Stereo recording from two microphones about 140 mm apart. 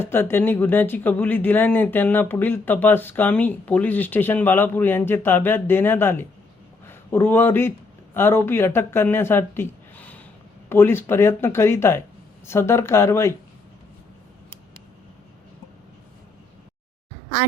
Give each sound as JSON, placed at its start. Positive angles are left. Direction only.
{"t": 0.0, "sound": "speech", "side_deg": 15}